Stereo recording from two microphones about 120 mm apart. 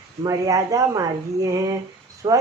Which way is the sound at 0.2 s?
30° right (ahead or behind).